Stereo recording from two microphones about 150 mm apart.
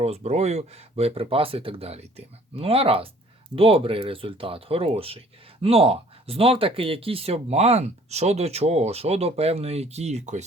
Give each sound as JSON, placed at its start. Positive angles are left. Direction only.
{"t": 0.0, "sound": "speech", "side_deg": -45}